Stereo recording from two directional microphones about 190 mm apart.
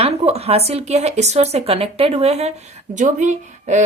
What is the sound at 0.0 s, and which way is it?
A woman's voice, 35° right (ahead or behind).